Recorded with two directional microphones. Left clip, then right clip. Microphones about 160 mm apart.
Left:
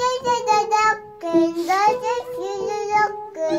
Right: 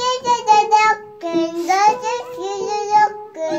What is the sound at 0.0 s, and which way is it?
Child singing, 30° left (ahead or behind).